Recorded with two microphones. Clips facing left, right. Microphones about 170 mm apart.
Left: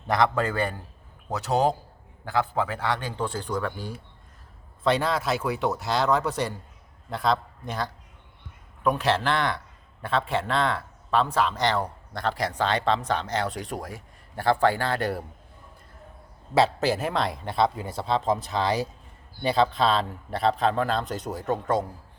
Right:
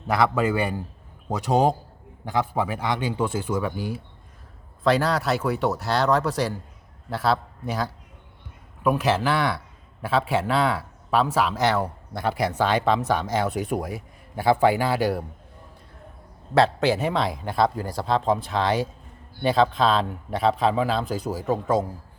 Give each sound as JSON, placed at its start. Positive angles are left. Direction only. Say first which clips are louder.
{"t": 0.1, "sound": "speech", "louder": "right 2 dB", "side_deg": -5}
{"t": 4.8, "sound": "a man's voice", "louder": "right 3 dB", "side_deg": 0}
{"t": 16.6, "sound": "a man's voice", "louder": "right 2 dB", "side_deg": 0}